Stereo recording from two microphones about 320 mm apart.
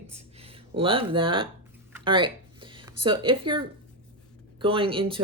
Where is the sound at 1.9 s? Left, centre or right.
Centre.